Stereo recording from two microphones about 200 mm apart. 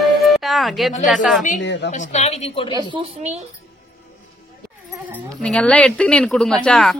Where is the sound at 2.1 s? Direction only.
30° left (ahead or behind).